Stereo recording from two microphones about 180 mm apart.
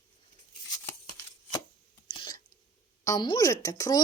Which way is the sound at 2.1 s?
25° left (ahead or behind).